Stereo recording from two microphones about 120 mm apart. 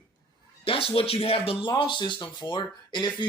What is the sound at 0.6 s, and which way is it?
Speech, 50° left (ahead or behind).